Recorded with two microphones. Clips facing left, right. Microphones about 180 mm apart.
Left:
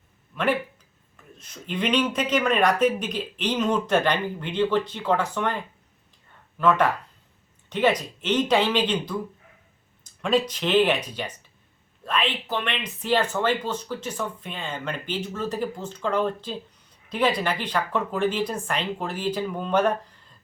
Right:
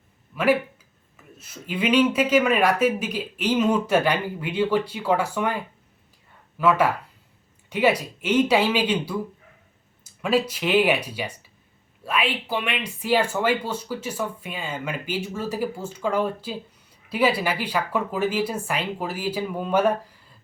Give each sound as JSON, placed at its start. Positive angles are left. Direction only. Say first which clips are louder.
{"t": 1.1, "sound": "speech", "louder": "right 2 dB", "side_deg": -5}